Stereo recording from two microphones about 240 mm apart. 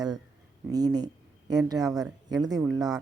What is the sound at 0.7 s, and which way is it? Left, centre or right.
A woman's voice, centre.